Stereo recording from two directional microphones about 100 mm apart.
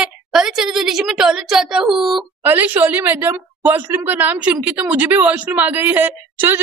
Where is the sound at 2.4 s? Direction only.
20° right (ahead or behind).